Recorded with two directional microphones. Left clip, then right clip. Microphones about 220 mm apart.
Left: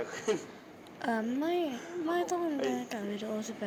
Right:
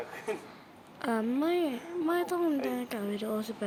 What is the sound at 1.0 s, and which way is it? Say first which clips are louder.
A woman's voice: right 2 dB; 10° right (ahead or behind).